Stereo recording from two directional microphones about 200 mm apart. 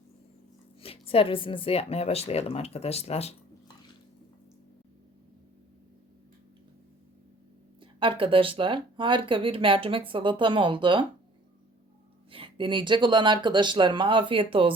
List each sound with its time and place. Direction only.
0.8 s speech: 30° left (ahead or behind)
7.8 s speech: 25° right (ahead or behind)
12.3 s speech: 25° right (ahead or behind)